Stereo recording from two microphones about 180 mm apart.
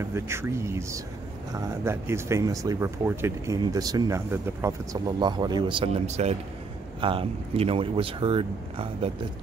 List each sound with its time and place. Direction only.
0.0 s speech: 15° right (ahead or behind); by 9.1 s 30° right (ahead or behind)